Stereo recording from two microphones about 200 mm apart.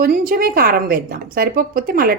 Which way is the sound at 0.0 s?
45° right (ahead or behind).